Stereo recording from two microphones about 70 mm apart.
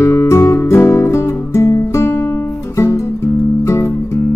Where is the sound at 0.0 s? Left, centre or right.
Left.